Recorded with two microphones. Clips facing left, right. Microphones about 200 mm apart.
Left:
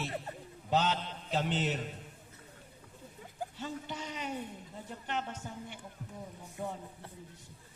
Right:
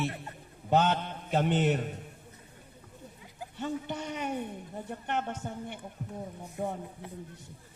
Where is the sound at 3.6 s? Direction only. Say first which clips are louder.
Right 9 dB; 55° right (ahead or behind).